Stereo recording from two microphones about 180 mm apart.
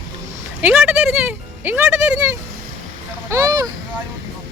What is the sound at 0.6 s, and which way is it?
Speech, 10° right (ahead or behind).